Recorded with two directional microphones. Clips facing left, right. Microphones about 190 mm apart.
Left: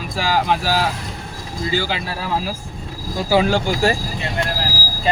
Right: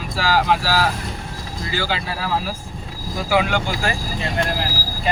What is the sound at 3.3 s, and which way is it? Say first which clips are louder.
Speech: left 3 dB; 30° left (ahead or behind).